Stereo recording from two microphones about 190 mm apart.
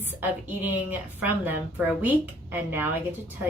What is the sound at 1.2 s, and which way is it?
A woman's voice, 10° right (ahead or behind).